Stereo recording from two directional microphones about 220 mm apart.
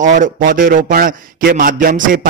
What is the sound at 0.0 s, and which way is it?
Speech, 35° right (ahead or behind).